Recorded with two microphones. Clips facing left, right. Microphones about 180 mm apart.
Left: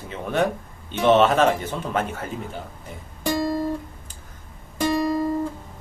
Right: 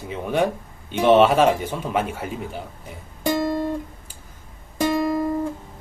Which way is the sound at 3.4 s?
25° right (ahead or behind).